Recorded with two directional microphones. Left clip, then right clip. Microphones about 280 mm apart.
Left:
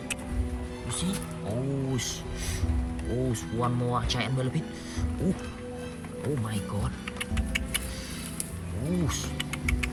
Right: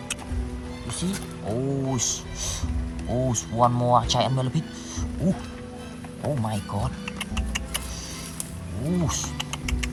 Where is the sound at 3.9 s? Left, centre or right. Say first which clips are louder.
Right 8 dB; centre.